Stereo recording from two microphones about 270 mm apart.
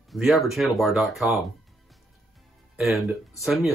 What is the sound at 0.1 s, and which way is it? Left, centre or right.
Speech, centre.